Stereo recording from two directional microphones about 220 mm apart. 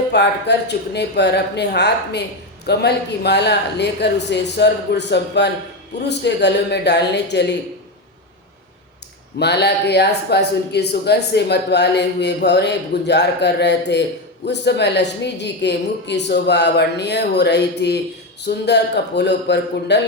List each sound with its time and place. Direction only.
0.1 s a man's voice: 50° left (ahead or behind)
9.4 s a man's voice: 50° left (ahead or behind)